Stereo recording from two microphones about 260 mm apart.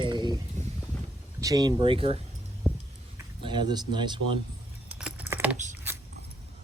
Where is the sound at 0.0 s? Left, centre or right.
Centre.